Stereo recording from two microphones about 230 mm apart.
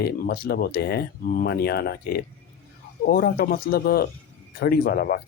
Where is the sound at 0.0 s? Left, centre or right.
Left.